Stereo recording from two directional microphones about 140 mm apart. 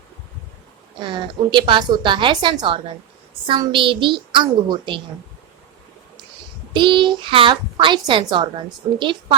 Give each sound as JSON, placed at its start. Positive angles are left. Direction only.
{"t": 1.0, "sound": "a woman's voice", "side_deg": -35}
{"t": 6.7, "sound": "a woman's voice", "side_deg": -35}